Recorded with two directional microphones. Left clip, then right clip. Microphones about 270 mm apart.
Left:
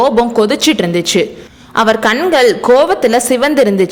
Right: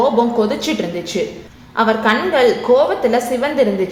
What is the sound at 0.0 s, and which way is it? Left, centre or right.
A woman's voice, left.